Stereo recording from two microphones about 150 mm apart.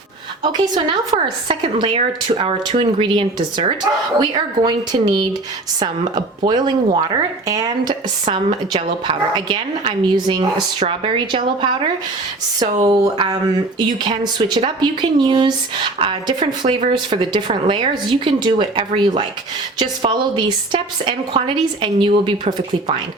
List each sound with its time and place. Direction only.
0.4 s speech: 25° right (ahead or behind)
1.1 s a woman's voice: 40° right (ahead or behind)